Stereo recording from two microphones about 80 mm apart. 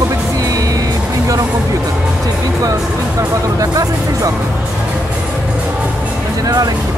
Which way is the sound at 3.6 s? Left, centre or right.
Right.